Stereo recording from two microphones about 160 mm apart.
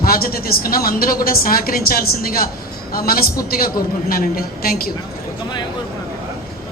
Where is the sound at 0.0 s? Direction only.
65° left (ahead or behind).